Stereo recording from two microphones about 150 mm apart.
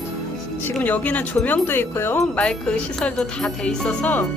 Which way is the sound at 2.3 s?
5° left (ahead or behind).